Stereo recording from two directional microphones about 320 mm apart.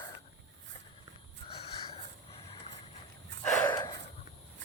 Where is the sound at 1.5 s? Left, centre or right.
Centre.